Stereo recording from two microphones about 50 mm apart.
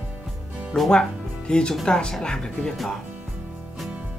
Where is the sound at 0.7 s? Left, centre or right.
Centre.